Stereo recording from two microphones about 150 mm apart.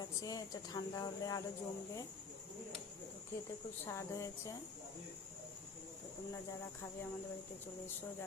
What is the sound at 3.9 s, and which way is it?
Speech, 20° left (ahead or behind).